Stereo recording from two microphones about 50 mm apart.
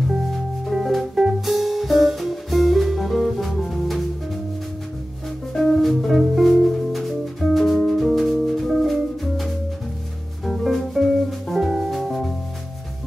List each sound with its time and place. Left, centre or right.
0.3 s music: centre
5.6 s music: centre